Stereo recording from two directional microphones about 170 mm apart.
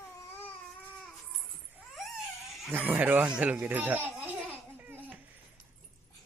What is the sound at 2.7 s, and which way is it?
Speech, 10° right (ahead or behind).